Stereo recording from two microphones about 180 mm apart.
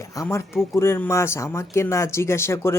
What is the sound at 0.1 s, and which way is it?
Speech, 15° left (ahead or behind).